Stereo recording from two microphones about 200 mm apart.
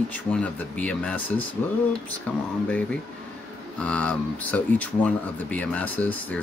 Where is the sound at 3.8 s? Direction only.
5° left (ahead or behind).